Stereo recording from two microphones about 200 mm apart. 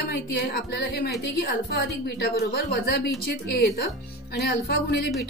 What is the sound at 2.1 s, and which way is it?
A woman's voice, 55° left (ahead or behind).